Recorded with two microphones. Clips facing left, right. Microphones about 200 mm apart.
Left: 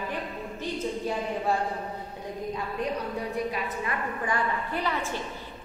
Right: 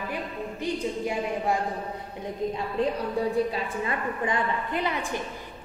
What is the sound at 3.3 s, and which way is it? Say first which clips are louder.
A woman's voice: right 4 dB; 30° right (ahead or behind).